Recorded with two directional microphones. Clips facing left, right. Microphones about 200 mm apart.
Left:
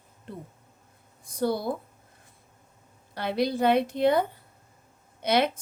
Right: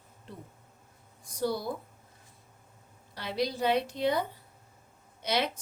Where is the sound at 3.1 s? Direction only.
55° left (ahead or behind).